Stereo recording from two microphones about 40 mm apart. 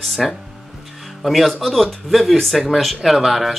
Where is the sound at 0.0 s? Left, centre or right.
Centre.